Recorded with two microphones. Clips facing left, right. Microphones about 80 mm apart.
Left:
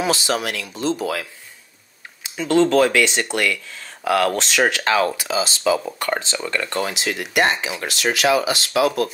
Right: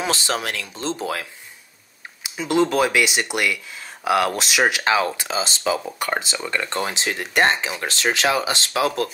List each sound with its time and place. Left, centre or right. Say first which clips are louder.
0.0 s speech: left 3 dB; right
2.2 s speech: left 3 dB; centre
5.1 s speech: left 3 dB; right
5.9 s speech: left 1 dB; centre; by 9.1 s right